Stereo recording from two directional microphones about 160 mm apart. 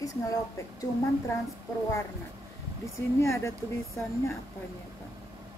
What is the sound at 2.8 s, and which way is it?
Speech, 20° left (ahead or behind).